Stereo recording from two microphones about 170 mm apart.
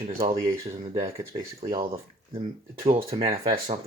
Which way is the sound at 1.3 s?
30° right (ahead or behind).